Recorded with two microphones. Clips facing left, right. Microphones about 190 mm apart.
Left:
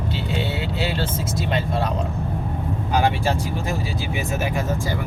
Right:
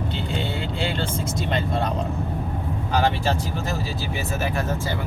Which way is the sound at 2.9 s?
10° left (ahead or behind).